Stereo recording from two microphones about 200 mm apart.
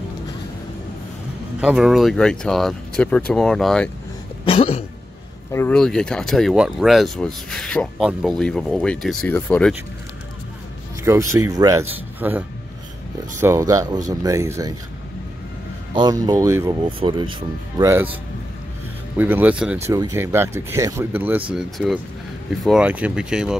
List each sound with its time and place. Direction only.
1.6 s speech: 5° right (ahead or behind)
4.5 s throat clearing: 30° left (ahead or behind)
5.5 s speech: 10° left (ahead or behind)
11.1 s speech: 15° right (ahead or behind)
15.9 s speech: 20° right (ahead or behind)
17.0 s speech: 25° right (ahead or behind)
19.1 s speech: 10° right (ahead or behind)